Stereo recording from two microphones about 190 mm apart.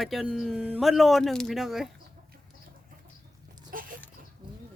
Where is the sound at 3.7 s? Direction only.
45° right (ahead or behind).